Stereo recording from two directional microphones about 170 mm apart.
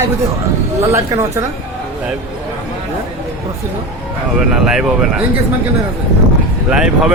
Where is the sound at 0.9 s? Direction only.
20° right (ahead or behind).